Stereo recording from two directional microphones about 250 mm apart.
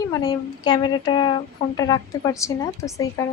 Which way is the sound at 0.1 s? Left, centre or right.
Centre.